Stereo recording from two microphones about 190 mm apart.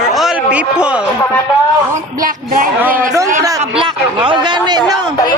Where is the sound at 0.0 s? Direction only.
Centre (ahead or behind).